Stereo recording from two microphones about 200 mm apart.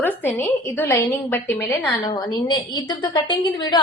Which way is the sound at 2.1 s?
20° left (ahead or behind).